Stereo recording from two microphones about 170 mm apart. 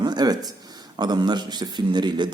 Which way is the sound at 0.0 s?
25° right (ahead or behind).